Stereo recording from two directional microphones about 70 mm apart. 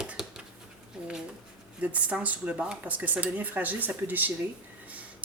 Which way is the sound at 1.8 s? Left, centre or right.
Centre.